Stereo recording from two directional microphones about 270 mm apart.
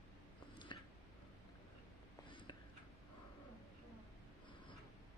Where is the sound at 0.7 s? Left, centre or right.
Centre.